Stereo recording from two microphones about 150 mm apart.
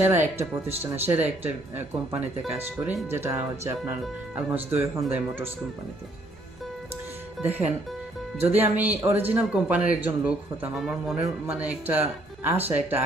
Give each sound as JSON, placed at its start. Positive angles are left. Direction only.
{"t": 0.0, "sound": "speech", "side_deg": -15}
{"t": 7.4, "sound": "speech", "side_deg": -10}
{"t": 12.6, "sound": "speech", "side_deg": -45}